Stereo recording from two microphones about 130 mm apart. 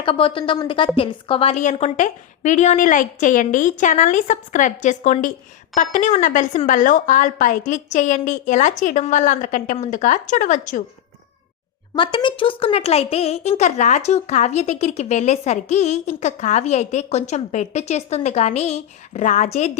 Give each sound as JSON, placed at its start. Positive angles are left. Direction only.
{"t": 0.0, "sound": "a woman's voice", "side_deg": 45}
{"t": 1.5, "sound": "a woman's voice", "side_deg": 70}
{"t": 11.9, "sound": "a woman's voice", "side_deg": 40}